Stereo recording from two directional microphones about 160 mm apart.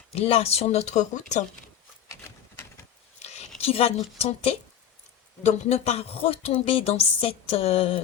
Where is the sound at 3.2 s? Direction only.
45° left (ahead or behind).